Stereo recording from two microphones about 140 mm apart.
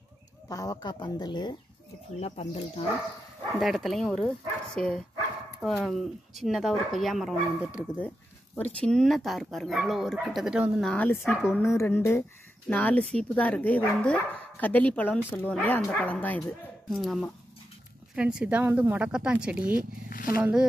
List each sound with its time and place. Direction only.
0.5 s speech: 25° left (ahead or behind)
2.1 s speech: 50° left (ahead or behind)
3.5 s speech: centre (ahead or behind)
8.8 s speech: 5° left (ahead or behind)
10.9 s speech: 10° left (ahead or behind)
16.9 s a woman's voice: centre (ahead or behind)
20.1 s speech: 90° left
20.3 s a woman's voice: 10° right (ahead or behind)